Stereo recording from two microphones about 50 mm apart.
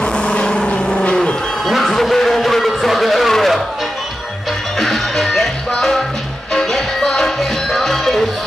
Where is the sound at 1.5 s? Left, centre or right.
Centre.